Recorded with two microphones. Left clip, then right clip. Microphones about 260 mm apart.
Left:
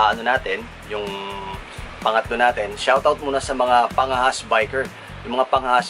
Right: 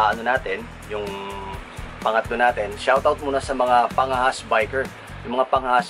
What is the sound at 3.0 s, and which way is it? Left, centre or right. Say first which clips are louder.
Speech: left 1 dB; right.